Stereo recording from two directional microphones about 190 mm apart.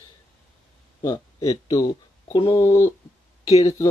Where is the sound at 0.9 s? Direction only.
20° left (ahead or behind).